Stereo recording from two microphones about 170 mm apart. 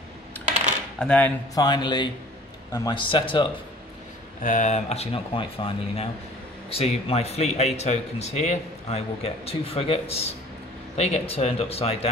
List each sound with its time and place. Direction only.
0.9 s speech: 5° left (ahead or behind)
1.5 s a man's voice: 25° left (ahead or behind)
4.4 s speech: 50° left (ahead or behind)